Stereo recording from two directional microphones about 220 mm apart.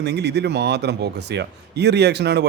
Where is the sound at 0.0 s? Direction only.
50° right (ahead or behind).